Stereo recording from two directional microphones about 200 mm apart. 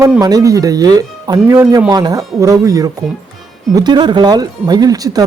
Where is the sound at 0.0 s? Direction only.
15° right (ahead or behind).